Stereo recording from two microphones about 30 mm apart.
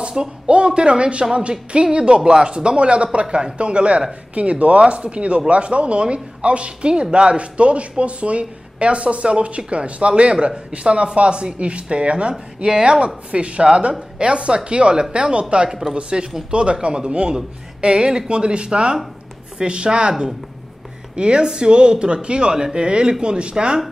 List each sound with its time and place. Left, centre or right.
0.2 s speech: centre
0.5 s speech: right
4.4 s speech: right
12.7 s speech: right
13.0 s speech: right